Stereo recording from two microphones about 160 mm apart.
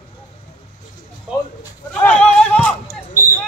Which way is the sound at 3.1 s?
15° left (ahead or behind).